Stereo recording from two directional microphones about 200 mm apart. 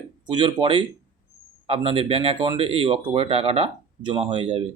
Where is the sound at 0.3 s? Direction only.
25° right (ahead or behind).